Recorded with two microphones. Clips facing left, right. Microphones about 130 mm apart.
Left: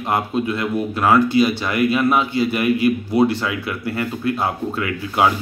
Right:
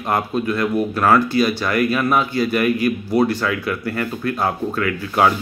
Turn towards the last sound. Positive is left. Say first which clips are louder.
# right 2 dB
turn(degrees=25)  # may be behind; listen again after turning